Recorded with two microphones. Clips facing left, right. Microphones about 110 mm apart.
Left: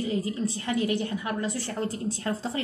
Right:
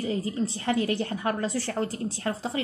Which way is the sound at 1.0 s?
40° right (ahead or behind).